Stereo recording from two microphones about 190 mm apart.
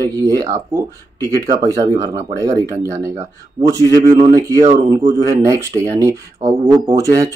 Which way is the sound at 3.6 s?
15° right (ahead or behind).